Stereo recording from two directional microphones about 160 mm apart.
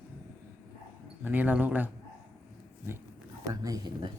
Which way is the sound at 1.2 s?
10° right (ahead or behind).